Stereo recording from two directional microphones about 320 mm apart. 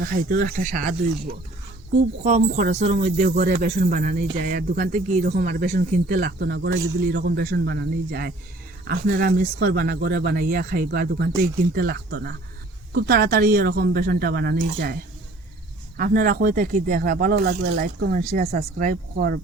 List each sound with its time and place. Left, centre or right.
0.0 s speech: right
16.0 s speech: right